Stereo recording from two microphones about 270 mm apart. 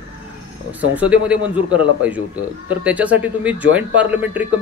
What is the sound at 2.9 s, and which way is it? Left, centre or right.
Speech, centre.